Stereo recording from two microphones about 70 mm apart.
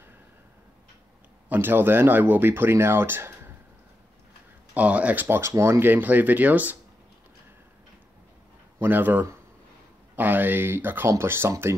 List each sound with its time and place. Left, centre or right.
1.5 s speech: right
4.7 s speech: right
5.6 s speech: right
8.7 s speech: right